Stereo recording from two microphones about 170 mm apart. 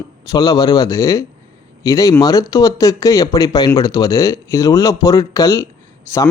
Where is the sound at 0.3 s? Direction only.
20° left (ahead or behind).